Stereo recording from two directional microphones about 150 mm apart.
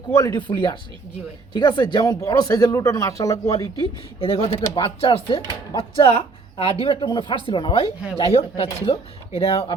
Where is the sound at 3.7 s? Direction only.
40° left (ahead or behind).